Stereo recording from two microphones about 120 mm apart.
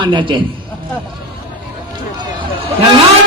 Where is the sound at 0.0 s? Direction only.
40° right (ahead or behind).